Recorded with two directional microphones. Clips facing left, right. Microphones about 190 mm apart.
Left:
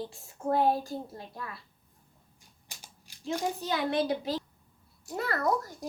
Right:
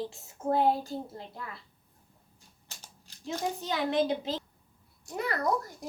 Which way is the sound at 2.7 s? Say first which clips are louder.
Even; 10° left (ahead or behind).